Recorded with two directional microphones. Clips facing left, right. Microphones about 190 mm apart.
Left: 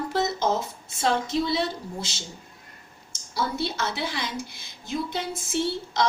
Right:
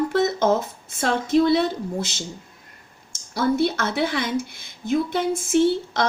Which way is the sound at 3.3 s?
55° right (ahead or behind).